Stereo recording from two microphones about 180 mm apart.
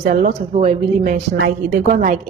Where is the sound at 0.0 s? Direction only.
45° right (ahead or behind).